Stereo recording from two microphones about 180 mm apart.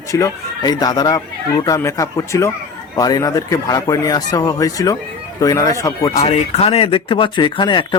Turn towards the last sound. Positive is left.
turn(degrees=25)  # may be behind; listen again after turning